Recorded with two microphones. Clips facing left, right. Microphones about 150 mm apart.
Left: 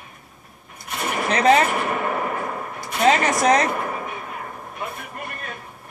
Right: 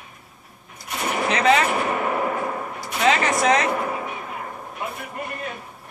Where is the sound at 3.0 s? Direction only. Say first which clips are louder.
Left 2 dB; 40° left (ahead or behind).